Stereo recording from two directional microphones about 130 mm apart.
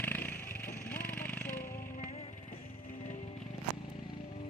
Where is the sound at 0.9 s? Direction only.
10° left (ahead or behind).